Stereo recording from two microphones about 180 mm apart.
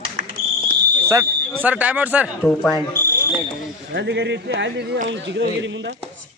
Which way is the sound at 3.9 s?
70° right (ahead or behind).